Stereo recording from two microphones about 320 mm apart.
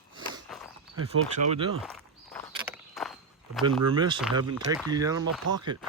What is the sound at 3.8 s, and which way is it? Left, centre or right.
Speech, centre.